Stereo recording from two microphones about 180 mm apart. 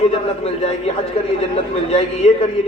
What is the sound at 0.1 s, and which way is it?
Speech, 35° left (ahead or behind).